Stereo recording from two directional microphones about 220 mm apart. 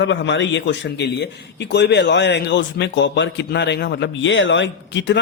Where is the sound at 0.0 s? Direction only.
55° left (ahead or behind).